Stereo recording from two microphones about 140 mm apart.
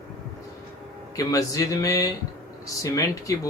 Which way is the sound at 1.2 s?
25° left (ahead or behind).